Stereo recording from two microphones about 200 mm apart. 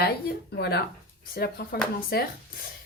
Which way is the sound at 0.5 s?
55° left (ahead or behind).